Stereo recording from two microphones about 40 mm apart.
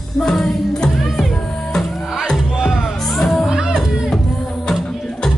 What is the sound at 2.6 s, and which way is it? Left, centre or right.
Music, centre.